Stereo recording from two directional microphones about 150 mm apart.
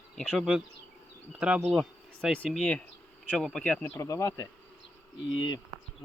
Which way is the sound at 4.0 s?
20° left (ahead or behind).